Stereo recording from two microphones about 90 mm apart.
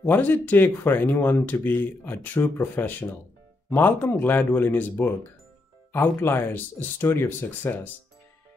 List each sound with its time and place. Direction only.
0.0 s speech: 20° left (ahead or behind)